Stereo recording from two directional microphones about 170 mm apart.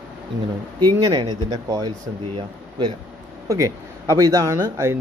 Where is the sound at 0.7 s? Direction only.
25° right (ahead or behind).